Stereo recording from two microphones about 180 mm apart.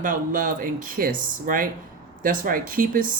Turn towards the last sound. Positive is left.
turn(degrees=-50)  # may be behind; listen again after turning